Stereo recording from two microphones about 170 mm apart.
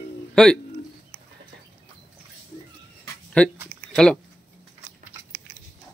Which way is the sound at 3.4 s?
5° left (ahead or behind).